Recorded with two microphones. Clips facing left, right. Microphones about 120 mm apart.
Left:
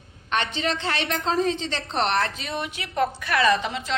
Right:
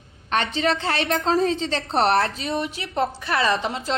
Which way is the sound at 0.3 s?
40° right (ahead or behind).